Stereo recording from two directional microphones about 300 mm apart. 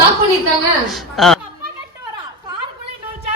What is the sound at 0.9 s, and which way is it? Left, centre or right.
Speech, centre.